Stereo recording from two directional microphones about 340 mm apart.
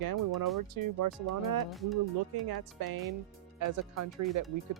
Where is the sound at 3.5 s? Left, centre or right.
Right.